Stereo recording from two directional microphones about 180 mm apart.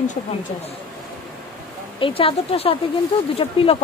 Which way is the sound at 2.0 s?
30° left (ahead or behind).